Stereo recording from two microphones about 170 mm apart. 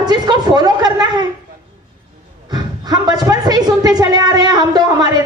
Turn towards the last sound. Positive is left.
turn(degrees=-25)  # may be behind; listen again after turning